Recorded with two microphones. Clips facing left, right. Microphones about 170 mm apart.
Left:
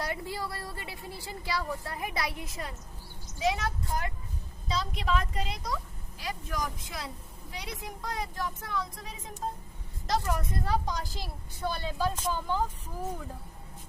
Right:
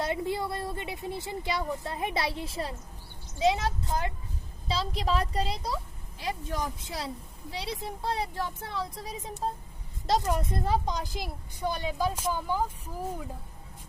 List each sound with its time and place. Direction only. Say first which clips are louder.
0.0 s a woman's voice: right 5 dB; 20° right (ahead or behind)
10.1 s a woman's voice: right 3 dB; 20° right (ahead or behind)